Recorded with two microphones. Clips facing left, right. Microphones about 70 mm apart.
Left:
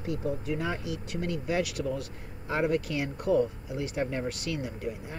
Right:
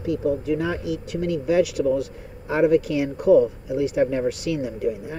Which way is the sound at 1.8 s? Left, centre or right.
Right.